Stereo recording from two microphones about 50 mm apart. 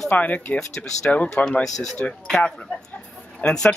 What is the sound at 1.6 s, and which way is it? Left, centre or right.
Speech, centre.